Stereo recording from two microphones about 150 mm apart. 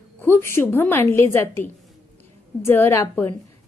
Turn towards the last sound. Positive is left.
turn(degrees=15)  # may be behind; listen again after turning